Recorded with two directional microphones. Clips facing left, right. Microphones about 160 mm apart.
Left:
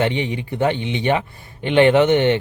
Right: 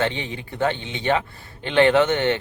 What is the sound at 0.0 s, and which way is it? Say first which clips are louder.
Speech: left 5 dB; 15° left (ahead or behind).